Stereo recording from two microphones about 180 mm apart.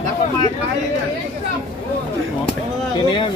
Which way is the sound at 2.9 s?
25° left (ahead or behind).